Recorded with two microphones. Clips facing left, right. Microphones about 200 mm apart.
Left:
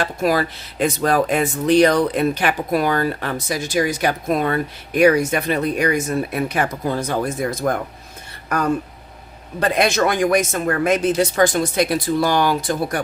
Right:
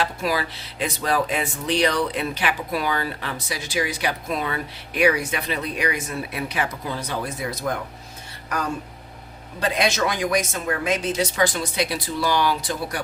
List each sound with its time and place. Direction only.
0.0 s speech: 50° left (ahead or behind)